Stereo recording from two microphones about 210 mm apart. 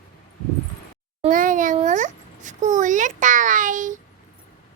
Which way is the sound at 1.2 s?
40° right (ahead or behind).